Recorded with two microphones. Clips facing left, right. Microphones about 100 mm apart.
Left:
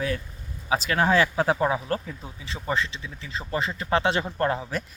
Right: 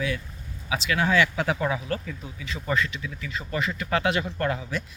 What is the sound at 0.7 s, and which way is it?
Speech, 40° left (ahead or behind).